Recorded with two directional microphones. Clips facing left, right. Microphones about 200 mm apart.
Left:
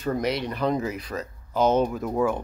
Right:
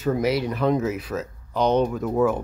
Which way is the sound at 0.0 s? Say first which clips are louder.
Right 4 dB; 5° right (ahead or behind).